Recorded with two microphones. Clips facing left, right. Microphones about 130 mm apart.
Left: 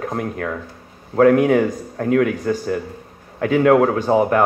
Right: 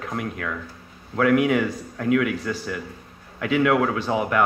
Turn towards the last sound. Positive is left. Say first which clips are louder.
# left 7 dB
turn(degrees=40)  # may be behind; listen again after turning